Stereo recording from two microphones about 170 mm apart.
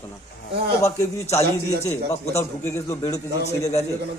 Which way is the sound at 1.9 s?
15° left (ahead or behind).